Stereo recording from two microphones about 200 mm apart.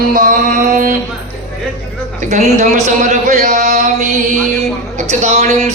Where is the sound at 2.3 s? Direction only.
35° right (ahead or behind).